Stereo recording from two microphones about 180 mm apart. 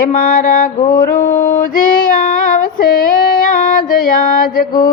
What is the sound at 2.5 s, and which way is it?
Female singing, 50° left (ahead or behind).